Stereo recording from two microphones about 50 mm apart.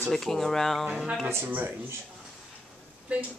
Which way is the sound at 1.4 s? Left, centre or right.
Right.